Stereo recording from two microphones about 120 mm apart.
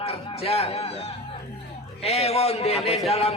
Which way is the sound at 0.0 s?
55° left (ahead or behind).